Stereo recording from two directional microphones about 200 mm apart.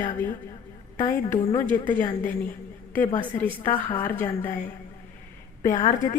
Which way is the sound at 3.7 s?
25° left (ahead or behind).